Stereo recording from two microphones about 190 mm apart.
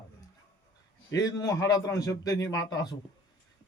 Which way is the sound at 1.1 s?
20° left (ahead or behind).